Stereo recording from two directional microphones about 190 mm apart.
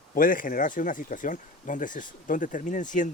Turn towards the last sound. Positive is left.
turn(degrees=40)  # may be behind; listen again after turning